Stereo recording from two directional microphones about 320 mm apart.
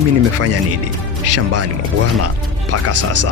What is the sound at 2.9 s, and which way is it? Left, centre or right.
Speech, right.